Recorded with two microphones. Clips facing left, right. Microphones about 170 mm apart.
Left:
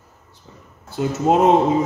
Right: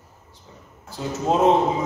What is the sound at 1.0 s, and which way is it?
Speech, 65° left (ahead or behind).